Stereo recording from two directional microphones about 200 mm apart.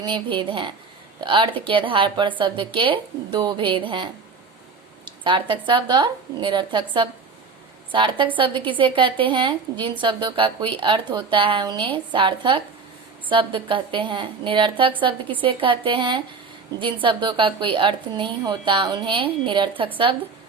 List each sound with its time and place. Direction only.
0.0 s a woman's voice: 25° right (ahead or behind)